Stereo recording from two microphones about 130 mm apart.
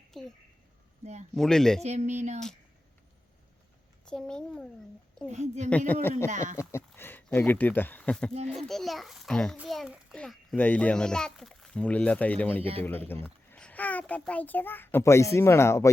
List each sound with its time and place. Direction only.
0.1 s speech: centre (ahead or behind)
1.4 s a child's voice: 5° left (ahead or behind)
1.8 s speech: 60° right (ahead or behind)
4.0 s a child's voice: 5° left (ahead or behind)
5.3 s speech: 60° right (ahead or behind)
5.6 s speech: 10° left (ahead or behind)
6.2 s speech: 70° right (ahead or behind)
6.6 s a child's voice: 20° left (ahead or behind)